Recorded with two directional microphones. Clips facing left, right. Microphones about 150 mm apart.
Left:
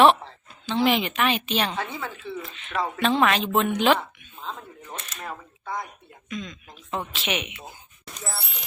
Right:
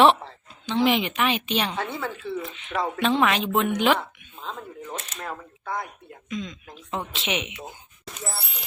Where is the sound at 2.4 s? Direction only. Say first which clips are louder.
Right 4 dB; 15° right (ahead or behind).